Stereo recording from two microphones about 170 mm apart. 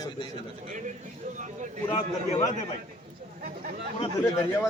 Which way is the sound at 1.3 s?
50° right (ahead or behind).